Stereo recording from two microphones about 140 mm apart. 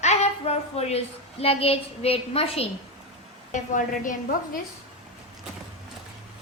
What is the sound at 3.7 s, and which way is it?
Speech, 70° left (ahead or behind).